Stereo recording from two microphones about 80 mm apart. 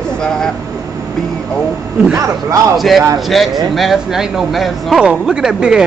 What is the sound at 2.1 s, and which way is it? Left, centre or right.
Speech, right.